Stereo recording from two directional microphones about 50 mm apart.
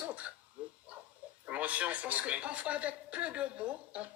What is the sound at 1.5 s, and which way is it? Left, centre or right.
Speech, right.